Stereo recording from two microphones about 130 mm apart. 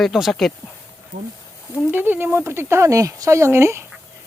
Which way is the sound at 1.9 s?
15° right (ahead or behind).